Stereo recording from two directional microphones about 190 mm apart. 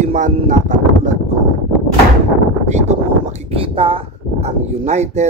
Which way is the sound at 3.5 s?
30° right (ahead or behind).